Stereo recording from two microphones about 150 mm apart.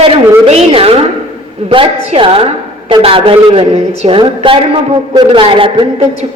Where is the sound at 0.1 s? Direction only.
40° right (ahead or behind).